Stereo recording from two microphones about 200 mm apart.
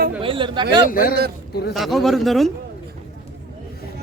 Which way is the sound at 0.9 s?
45° left (ahead or behind).